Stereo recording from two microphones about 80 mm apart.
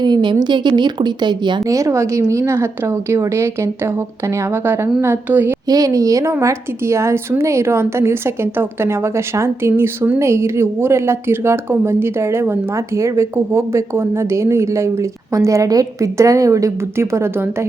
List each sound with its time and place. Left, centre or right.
0.0 s a woman's voice: right
1.6 s a woman's voice: right
5.6 s a woman's voice: right